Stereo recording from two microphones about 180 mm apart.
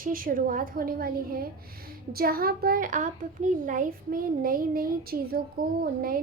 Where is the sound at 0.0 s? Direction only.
50° right (ahead or behind).